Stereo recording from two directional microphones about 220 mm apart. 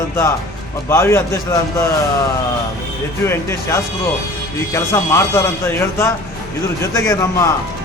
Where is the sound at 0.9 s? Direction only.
10° left (ahead or behind).